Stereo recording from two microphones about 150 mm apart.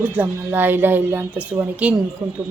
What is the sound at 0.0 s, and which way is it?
Speech, 10° right (ahead or behind).